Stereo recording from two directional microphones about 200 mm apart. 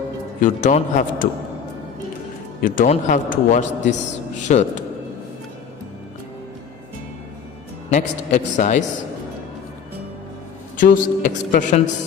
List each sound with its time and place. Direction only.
0.3 s a man's voice: 40° left (ahead or behind)
2.6 s a man's voice: 40° left (ahead or behind)
7.9 s a man's voice: 35° left (ahead or behind)
10.8 s a man's voice: 45° left (ahead or behind)